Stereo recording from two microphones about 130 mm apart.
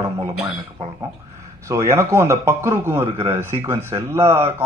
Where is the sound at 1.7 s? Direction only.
20° right (ahead or behind).